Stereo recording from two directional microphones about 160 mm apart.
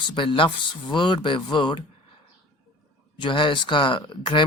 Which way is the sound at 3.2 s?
30° left (ahead or behind).